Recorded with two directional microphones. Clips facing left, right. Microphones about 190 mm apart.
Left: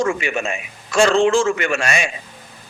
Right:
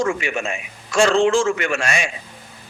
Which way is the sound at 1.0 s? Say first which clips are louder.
Left 1 dB; 65° left (ahead or behind).